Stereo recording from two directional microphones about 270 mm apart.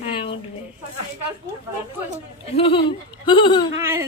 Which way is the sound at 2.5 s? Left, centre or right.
Centre.